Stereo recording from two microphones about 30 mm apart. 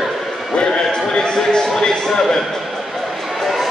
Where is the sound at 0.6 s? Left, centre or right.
Left.